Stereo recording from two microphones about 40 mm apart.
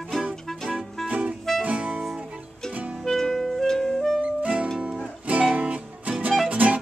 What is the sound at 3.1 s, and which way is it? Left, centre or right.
Clarinet, centre.